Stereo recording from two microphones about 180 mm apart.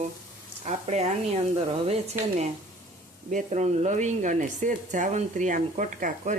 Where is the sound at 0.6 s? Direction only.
40° right (ahead or behind).